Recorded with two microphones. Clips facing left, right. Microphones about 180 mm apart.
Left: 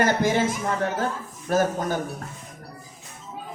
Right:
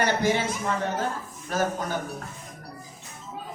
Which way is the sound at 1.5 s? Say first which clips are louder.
Left 5 dB; 45° left (ahead or behind).